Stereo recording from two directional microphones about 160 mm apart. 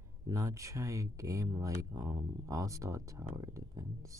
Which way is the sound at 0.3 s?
20° right (ahead or behind).